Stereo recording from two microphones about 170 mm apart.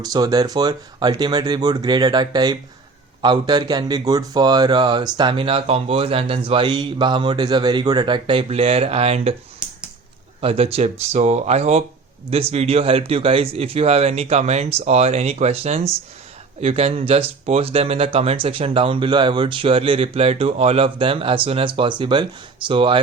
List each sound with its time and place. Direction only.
0.0 s speech: 20° right (ahead or behind)
10.4 s speech: 35° right (ahead or behind)